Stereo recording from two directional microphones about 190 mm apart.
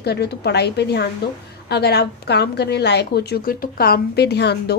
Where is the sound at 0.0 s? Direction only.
60° left (ahead or behind).